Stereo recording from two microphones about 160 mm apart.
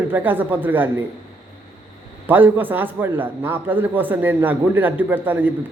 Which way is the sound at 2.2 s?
10° right (ahead or behind).